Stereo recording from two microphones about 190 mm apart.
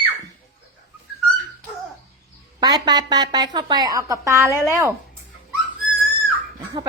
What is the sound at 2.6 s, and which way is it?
A woman's voice, 20° right (ahead or behind).